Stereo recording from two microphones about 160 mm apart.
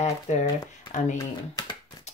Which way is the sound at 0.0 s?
45° left (ahead or behind).